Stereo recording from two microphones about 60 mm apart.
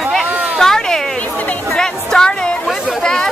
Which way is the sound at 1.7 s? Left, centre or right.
Centre.